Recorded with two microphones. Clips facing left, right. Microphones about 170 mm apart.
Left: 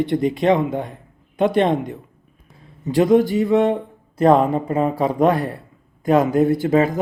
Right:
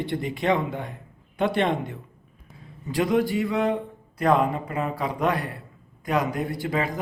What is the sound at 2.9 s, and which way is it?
Speech, 25° left (ahead or behind).